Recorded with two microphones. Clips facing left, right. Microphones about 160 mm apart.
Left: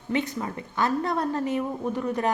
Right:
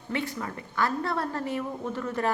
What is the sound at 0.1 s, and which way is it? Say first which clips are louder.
A woman's voice: left 4 dB; 20° left (ahead or behind).